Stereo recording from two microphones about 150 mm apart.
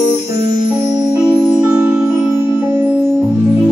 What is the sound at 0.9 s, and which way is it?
Music, 25° right (ahead or behind).